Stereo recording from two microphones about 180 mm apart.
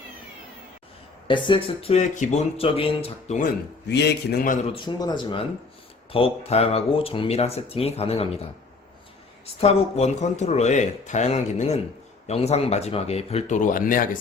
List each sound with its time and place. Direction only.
1.3 s speech: 25° left (ahead or behind)
3.8 s a man's voice: 70° left (ahead or behind); by 4.6 s 50° left (ahead or behind)
4.7 s speech: 25° left (ahead or behind)
9.6 s speech: 35° left (ahead or behind)